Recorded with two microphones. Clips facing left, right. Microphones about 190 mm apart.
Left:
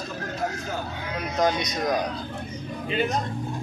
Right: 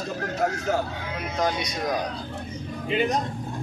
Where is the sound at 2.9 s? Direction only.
15° right (ahead or behind).